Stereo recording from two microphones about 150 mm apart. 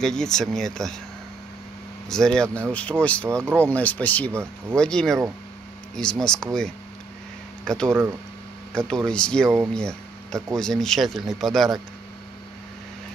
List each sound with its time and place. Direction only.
0.0 s speech: 5° left (ahead or behind)
2.0 s speech: 5° left (ahead or behind)
3.3 s speech: 15° right (ahead or behind)
3.5 s speech: 10° left (ahead or behind)
4.3 s speech: 15° right (ahead or behind)
4.7 s speech: 5° left (ahead or behind)